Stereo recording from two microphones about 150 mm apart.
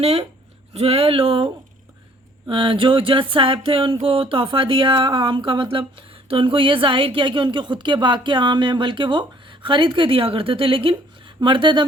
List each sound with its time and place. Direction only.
0.0 s speech: 40° right (ahead or behind)
2.5 s speech: 35° right (ahead or behind)